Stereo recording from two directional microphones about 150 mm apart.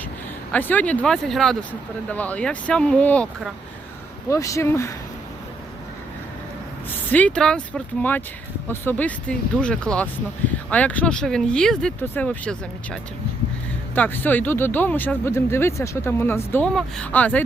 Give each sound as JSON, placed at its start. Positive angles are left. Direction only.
{"t": 0.5, "sound": "speech", "side_deg": 10}
{"t": 4.3, "sound": "speech", "side_deg": 20}
{"t": 7.1, "sound": "speech", "side_deg": 10}